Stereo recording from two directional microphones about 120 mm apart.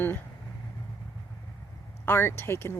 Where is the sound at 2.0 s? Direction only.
20° left (ahead or behind).